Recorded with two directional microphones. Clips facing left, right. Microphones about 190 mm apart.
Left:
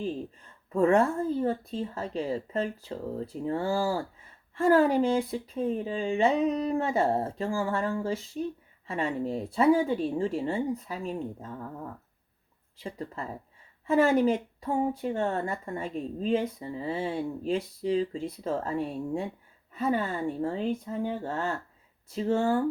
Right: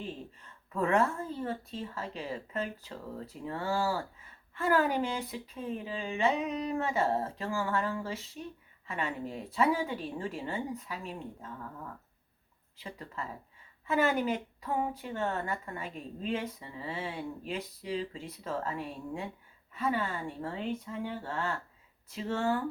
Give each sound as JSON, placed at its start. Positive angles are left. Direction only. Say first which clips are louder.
{"t": 0.7, "sound": "speech", "louder": "left 6 dB", "side_deg": 35}
{"t": 12.8, "sound": "speech", "louder": "left 5 dB", "side_deg": 35}